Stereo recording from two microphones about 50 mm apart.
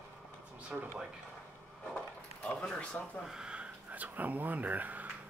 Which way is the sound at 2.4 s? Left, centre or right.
Left.